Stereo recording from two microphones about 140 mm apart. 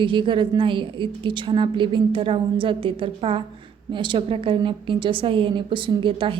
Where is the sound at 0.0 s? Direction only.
35° right (ahead or behind).